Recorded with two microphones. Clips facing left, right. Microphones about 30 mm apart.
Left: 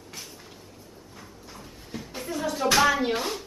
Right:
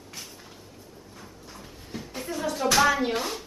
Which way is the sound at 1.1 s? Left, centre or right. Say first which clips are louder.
Left 1 dB; centre.